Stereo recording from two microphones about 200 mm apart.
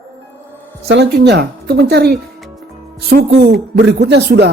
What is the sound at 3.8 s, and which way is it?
Speech, 60° right (ahead or behind).